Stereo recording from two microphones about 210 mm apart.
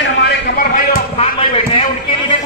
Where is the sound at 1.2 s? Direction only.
30° left (ahead or behind).